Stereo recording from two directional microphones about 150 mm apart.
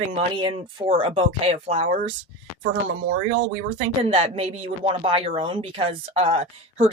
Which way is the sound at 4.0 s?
40° right (ahead or behind).